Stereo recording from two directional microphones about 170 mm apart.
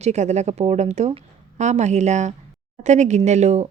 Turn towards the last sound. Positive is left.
turn(degrees=-40)  # may be behind; listen again after turning